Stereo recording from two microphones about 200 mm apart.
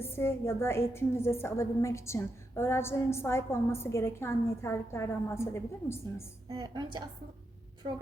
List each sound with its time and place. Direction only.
0.0 s a woman's voice: 10° left (ahead or behind)
6.5 s a woman's voice: 20° right (ahead or behind)